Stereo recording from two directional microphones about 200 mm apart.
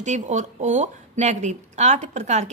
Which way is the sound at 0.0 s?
35° right (ahead or behind).